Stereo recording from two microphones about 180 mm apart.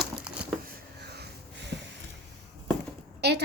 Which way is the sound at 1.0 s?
70° right (ahead or behind).